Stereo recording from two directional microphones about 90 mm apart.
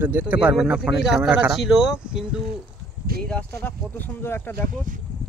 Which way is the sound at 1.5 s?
5° right (ahead or behind).